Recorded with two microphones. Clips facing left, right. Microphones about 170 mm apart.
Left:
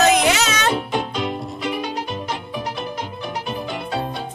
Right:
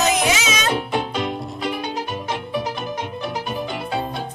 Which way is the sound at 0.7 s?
Centre (ahead or behind).